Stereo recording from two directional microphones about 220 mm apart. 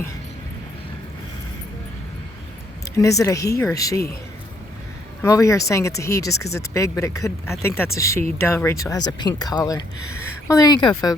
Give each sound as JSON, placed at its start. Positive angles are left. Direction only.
{"t": 2.9, "sound": "speech", "side_deg": 15}
{"t": 5.2, "sound": "speech", "side_deg": 15}